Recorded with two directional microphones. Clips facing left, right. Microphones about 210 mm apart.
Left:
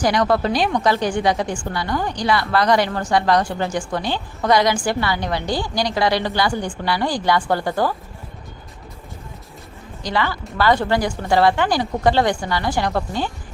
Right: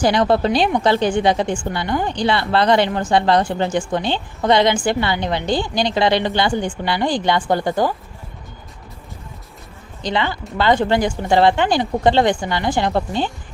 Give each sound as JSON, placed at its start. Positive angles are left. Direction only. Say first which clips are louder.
{"t": 0.0, "sound": "a woman's voice", "louder": "right 2 dB", "side_deg": -25}
{"t": 10.0, "sound": "a woman's voice", "louder": "right 1 dB", "side_deg": -20}